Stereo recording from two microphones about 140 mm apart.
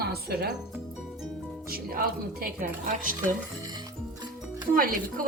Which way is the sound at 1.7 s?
90° right.